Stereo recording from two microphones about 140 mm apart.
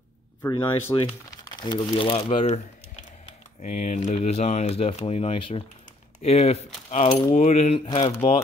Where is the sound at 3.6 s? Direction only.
60° left (ahead or behind).